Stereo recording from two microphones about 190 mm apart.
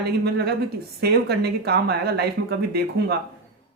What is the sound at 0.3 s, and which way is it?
Speech, 55° right (ahead or behind).